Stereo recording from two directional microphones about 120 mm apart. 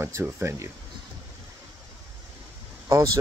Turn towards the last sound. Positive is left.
turn(degrees=-30)  # may be behind; listen again after turning